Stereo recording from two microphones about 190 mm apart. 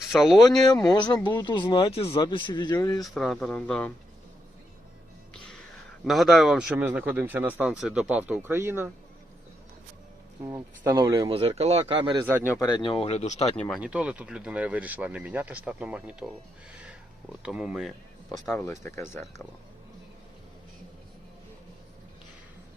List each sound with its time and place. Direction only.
0.1 s speech: centre (ahead or behind)
0.9 s speech: 20° left (ahead or behind)
3.0 s speech: centre (ahead or behind)
6.1 s speech: centre (ahead or behind)
10.4 s speech: 20° right (ahead or behind)
11.3 s speech: 30° right (ahead or behind)
12.2 s speech: 10° right (ahead or behind)
12.5 s speech: 20° left (ahead or behind)
13.6 s speech: centre (ahead or behind)
17.4 s speech: centre (ahead or behind)
18.7 s speech: 15° left (ahead or behind)